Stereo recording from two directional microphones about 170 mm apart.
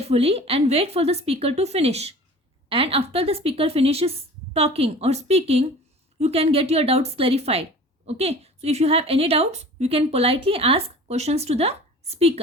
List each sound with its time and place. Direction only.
0.0 s a woman's voice: 35° right (ahead or behind)